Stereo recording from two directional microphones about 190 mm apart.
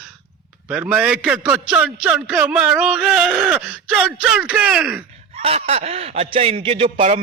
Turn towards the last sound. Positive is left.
turn(degrees=-35)  # may be behind; listen again after turning